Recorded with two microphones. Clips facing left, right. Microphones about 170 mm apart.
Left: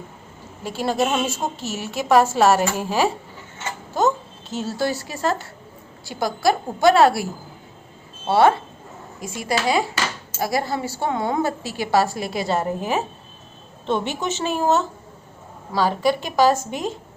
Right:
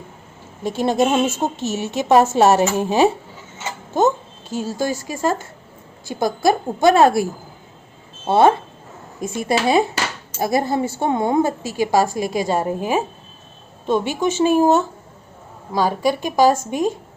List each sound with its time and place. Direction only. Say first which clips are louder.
0.6 s a woman's voice: right 4 dB; 20° right (ahead or behind)
3.6 s a sound: right 3 dB; 20° right (ahead or behind)
4.6 s a woman's voice: right 1 dB; 15° right (ahead or behind)
8.3 s a woman's voice: right 2 dB; 20° right (ahead or behind)